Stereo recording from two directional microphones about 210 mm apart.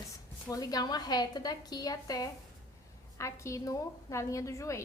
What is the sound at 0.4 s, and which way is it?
Speech, 15° left (ahead or behind).